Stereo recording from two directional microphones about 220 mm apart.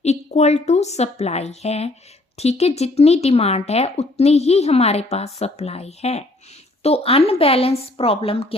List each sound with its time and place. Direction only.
0.0 s a woman's voice: 30° left (ahead or behind)